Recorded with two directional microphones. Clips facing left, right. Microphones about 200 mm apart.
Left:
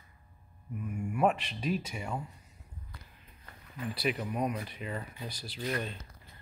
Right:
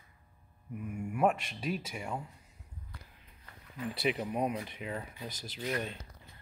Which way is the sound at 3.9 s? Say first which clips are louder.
Even; 25° right (ahead or behind).